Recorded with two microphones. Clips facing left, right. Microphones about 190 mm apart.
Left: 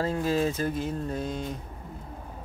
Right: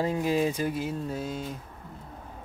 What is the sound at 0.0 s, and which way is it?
Speech, 15° right (ahead or behind).